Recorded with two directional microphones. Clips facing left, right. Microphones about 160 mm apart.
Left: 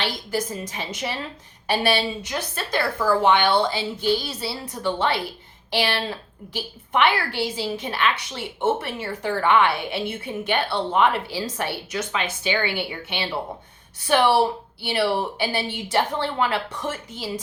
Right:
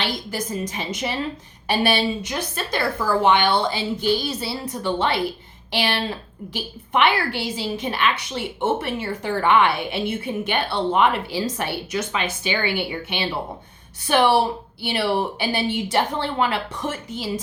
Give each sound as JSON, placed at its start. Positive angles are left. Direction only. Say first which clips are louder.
{"t": 0.0, "sound": "a woman's voice", "louder": "left 1 dB", "side_deg": -20}